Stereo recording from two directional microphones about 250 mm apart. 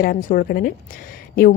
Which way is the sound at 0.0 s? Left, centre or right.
Left.